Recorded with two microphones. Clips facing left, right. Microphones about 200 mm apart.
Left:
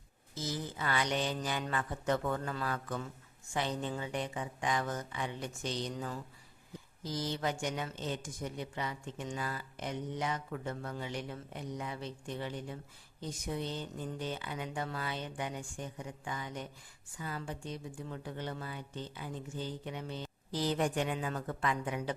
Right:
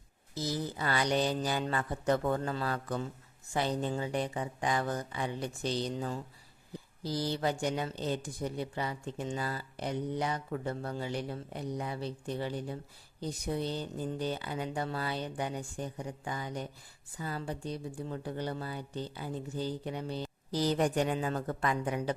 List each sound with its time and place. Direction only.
0.3 s speech: 35° right (ahead or behind)